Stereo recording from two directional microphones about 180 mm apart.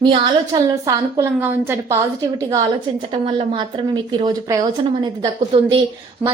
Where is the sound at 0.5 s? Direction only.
20° right (ahead or behind).